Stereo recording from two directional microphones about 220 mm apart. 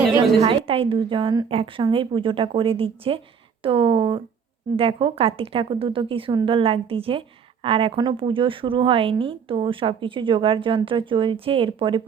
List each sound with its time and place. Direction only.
0.4 s a woman's voice: 25° right (ahead or behind)